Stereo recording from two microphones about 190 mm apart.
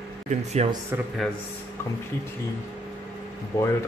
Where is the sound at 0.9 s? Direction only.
10° right (ahead or behind).